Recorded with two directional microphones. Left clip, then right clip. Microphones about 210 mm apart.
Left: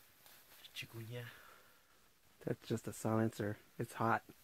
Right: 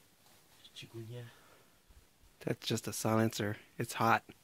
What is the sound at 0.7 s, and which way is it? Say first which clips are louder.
Speech: even; 15° left (ahead or behind).